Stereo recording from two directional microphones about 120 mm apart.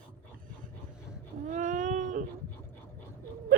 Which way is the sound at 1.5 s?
90° right.